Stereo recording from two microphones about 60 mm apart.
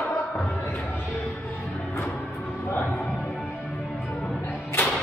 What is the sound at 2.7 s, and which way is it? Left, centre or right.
Music, left.